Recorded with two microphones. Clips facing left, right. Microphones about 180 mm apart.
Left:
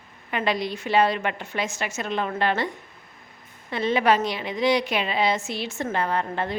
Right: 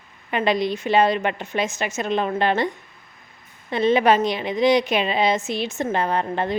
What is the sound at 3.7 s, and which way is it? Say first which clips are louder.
A woman's voice: right 4 dB; 20° right (ahead or behind).